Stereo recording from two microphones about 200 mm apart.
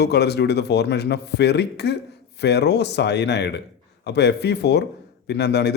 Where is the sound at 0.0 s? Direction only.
55° left (ahead or behind).